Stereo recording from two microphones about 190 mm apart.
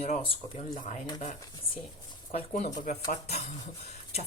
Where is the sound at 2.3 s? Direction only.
40° left (ahead or behind).